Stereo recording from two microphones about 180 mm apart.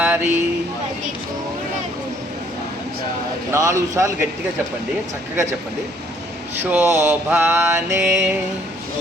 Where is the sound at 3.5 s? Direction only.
15° right (ahead or behind).